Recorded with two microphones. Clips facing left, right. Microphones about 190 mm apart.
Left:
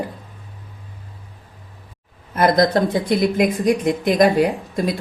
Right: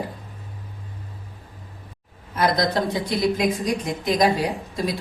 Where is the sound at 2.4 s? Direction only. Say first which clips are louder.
Left 6 dB; 50° left (ahead or behind).